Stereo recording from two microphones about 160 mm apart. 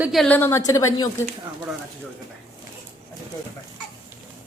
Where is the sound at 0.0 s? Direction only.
Centre (ahead or behind).